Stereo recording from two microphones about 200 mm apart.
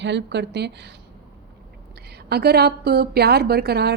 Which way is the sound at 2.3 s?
55° right (ahead or behind).